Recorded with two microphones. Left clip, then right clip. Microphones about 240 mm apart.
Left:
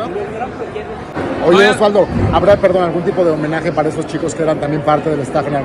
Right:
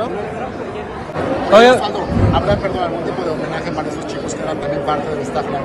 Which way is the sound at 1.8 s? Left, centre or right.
Left.